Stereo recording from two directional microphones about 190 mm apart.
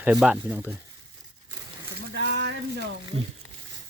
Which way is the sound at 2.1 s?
60° right (ahead or behind).